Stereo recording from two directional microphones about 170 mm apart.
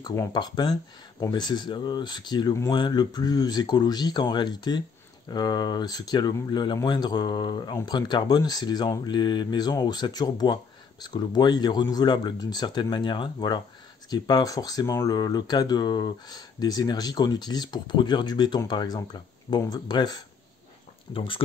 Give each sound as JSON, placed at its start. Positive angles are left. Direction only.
{"t": 0.0, "sound": "speech", "side_deg": 20}